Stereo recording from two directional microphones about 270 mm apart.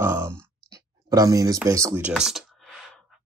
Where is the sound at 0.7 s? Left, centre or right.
Centre.